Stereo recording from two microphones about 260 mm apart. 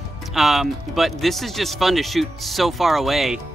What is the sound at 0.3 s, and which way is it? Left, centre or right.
Speech, centre.